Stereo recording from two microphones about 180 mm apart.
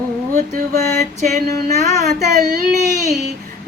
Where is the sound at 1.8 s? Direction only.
40° right (ahead or behind).